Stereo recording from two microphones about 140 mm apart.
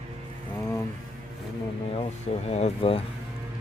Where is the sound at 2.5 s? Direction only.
50° left (ahead or behind).